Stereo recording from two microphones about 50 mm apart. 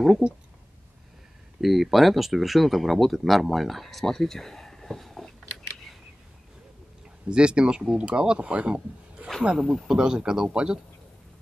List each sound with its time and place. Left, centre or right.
1.6 s speech: centre
7.2 s a man's voice: centre